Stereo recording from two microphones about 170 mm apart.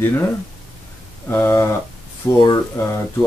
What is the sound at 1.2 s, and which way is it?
Speech, 15° left (ahead or behind).